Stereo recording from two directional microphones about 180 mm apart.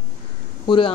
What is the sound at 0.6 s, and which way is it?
Speech, 25° left (ahead or behind).